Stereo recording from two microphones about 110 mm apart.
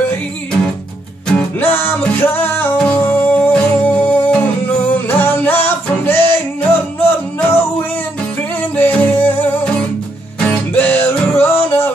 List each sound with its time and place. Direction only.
1.2 s music: 15° left (ahead or behind)
8.7 s music: 15° left (ahead or behind)